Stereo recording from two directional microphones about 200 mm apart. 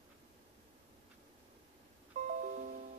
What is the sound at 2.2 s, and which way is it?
Music, 40° right (ahead or behind).